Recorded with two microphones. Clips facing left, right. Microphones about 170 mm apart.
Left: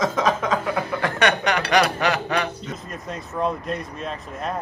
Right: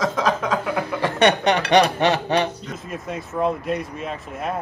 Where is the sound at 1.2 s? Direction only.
25° right (ahead or behind).